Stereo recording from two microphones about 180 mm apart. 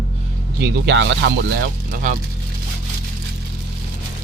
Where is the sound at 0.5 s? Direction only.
70° right (ahead or behind); by 2.2 s 50° right (ahead or behind).